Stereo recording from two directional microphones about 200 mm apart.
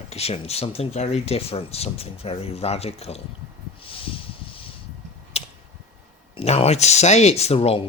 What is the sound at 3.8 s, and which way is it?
Snort, 25° left (ahead or behind).